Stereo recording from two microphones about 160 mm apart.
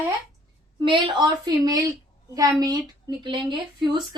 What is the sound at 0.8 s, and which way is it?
Speech, 30° right (ahead or behind).